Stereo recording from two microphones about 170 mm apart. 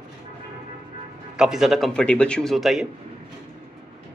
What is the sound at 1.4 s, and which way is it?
Speech, 5° right (ahead or behind).